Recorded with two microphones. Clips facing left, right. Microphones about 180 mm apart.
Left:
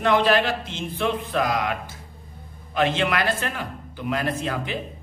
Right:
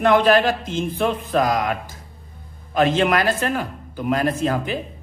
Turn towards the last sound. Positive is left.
turn(degrees=-40)  # may be behind; listen again after turning